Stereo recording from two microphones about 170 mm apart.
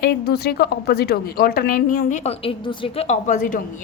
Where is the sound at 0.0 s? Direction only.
70° left (ahead or behind).